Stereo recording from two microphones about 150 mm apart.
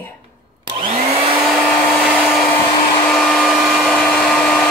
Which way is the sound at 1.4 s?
Centre (ahead or behind).